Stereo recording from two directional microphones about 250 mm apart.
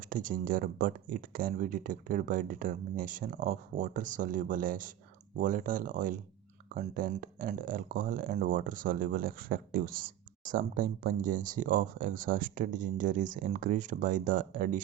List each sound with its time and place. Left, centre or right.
0.1 s speech: right